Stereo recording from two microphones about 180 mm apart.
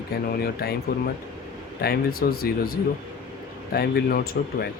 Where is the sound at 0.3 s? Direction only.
60° left (ahead or behind).